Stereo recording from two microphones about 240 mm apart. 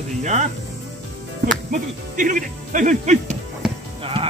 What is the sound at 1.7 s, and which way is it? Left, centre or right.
Speech, right.